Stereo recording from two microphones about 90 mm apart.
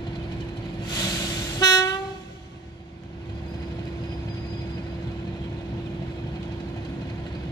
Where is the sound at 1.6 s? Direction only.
45° left (ahead or behind).